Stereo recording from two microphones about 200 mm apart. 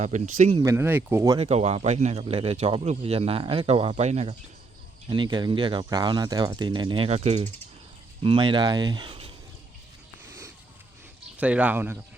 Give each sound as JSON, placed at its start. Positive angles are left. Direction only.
{"t": 0.0, "sound": "speech", "side_deg": -40}
{"t": 0.6, "sound": "speech", "side_deg": -15}
{"t": 1.4, "sound": "speech", "side_deg": -30}
{"t": 5.0, "sound": "speech", "side_deg": -25}
{"t": 11.3, "sound": "speech", "side_deg": -5}